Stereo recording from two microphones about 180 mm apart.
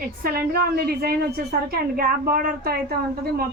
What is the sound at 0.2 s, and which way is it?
A woman's voice, 55° right (ahead or behind).